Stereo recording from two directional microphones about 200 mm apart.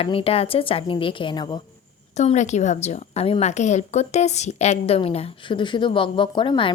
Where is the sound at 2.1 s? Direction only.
35° left (ahead or behind).